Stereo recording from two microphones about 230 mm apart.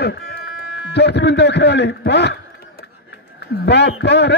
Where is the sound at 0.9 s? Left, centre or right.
Left.